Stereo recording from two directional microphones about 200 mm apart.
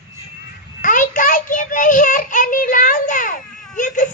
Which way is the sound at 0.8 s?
40° left (ahead or behind).